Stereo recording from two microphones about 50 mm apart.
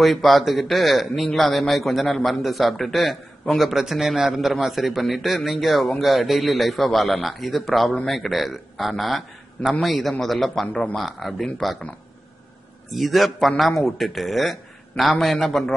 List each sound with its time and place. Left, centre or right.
0.0 s a man's voice: centre
10.7 s speech: centre
11.0 s a man's voice: centre
12.9 s a man's voice: centre